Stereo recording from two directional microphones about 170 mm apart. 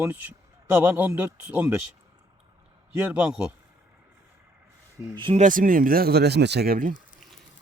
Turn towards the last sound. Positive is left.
turn(degrees=-60)  # may be behind; listen again after turning